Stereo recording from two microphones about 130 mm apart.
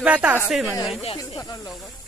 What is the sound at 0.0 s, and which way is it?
Speech, 10° right (ahead or behind).